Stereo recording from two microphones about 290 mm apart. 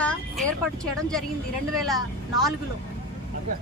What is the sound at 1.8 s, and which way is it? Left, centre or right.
Speech, centre.